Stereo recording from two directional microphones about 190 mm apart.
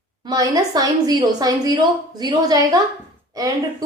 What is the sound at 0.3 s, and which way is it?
A woman's voice, 20° right (ahead or behind).